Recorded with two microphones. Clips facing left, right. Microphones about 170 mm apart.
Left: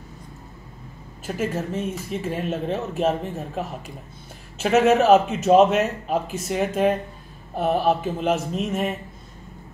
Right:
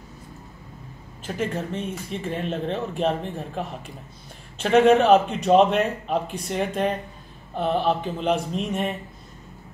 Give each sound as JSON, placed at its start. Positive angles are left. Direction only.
{"t": 1.2, "sound": "speech", "side_deg": 5}